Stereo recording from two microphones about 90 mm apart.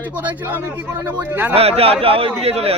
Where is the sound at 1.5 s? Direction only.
90° right.